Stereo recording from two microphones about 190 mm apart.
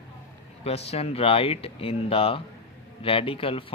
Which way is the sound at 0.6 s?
30° left (ahead or behind).